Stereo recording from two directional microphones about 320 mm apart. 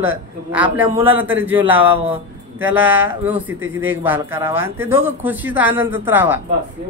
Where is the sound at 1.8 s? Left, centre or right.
Centre.